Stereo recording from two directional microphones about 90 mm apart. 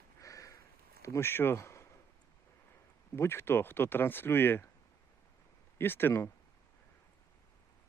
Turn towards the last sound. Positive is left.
turn(degrees=25)  # may be behind; listen again after turning